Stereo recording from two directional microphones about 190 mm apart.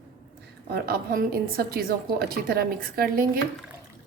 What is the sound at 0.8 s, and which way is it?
A woman's voice, 50° right (ahead or behind).